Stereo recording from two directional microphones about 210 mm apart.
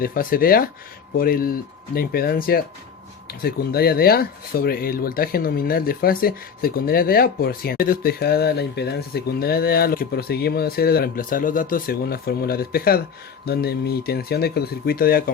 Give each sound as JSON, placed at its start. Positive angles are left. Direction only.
{"t": 0.0, "sound": "speech", "side_deg": 45}